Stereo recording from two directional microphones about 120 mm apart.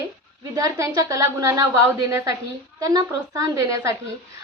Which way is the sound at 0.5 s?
25° right (ahead or behind).